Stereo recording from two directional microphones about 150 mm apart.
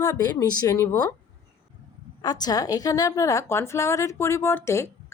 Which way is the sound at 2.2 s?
25° left (ahead or behind).